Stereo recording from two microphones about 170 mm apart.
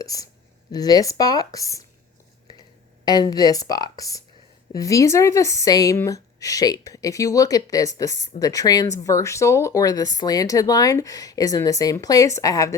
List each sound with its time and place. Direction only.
0.0 s speech: 20° left (ahead or behind)
3.0 s speech: 25° left (ahead or behind)